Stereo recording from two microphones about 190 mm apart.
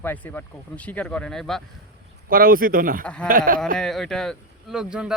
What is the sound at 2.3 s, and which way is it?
A man's voice, 50° right (ahead or behind).